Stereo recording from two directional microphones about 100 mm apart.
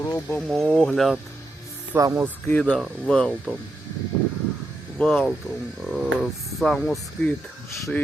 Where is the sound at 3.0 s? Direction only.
10° left (ahead or behind).